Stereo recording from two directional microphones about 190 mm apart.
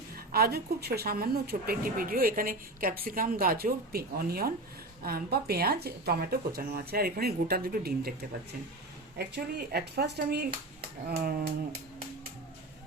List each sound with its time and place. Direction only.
0.3 s speech: 55° right (ahead or behind)
9.1 s speech: 55° right (ahead or behind)